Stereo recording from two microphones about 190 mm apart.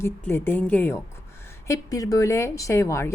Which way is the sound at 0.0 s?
10° left (ahead or behind).